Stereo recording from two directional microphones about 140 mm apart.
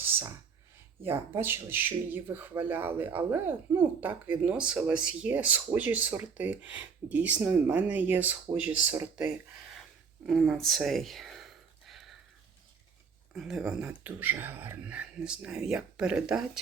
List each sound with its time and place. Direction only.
0.0 s clicking: 15° right (ahead or behind)
1.0 s speech: 15° right (ahead or behind)
10.2 s a sound: centre (ahead or behind)
13.3 s speech: centre (ahead or behind)
13.8 s speech: 15° right (ahead or behind)